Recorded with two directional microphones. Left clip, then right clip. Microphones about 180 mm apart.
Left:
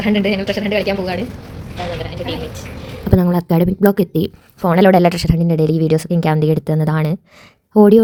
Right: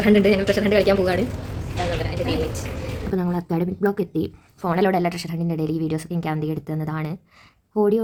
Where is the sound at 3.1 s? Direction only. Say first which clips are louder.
Left 9 dB; 35° left (ahead or behind).